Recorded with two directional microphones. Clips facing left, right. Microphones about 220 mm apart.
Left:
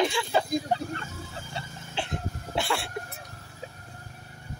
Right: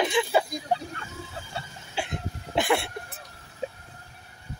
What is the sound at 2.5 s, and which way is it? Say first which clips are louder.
Speech: right 5 dB; 20° right (ahead or behind).